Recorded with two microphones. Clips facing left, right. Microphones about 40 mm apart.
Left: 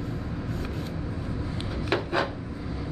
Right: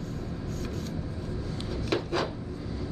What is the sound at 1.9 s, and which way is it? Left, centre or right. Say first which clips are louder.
Chopping: left 3 dB; centre.